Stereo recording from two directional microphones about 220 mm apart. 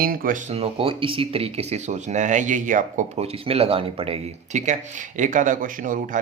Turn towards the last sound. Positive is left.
turn(degrees=-35)  # may be behind; listen again after turning